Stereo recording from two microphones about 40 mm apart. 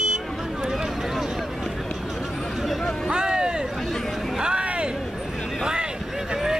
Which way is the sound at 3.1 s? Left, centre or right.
Centre.